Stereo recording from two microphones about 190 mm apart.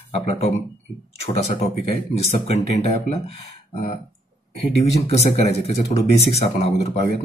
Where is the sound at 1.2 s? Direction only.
35° left (ahead or behind).